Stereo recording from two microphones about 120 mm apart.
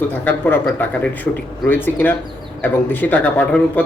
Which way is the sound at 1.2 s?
15° left (ahead or behind).